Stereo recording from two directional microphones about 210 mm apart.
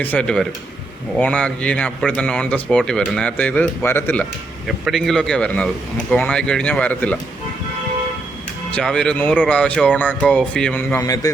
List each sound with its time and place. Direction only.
0.0 s speech: 5° left (ahead or behind)
8.7 s speech: 5° left (ahead or behind)